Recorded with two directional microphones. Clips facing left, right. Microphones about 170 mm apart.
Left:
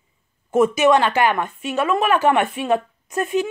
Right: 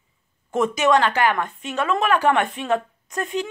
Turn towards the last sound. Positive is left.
turn(degrees=20)  # may be behind; listen again after turning